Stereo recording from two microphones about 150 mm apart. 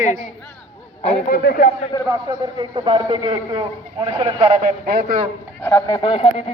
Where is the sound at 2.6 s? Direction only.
35° right (ahead or behind).